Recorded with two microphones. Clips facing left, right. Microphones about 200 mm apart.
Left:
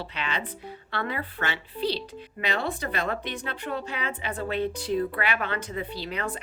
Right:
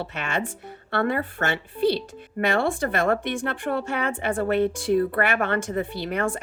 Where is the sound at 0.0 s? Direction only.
50° right (ahead or behind).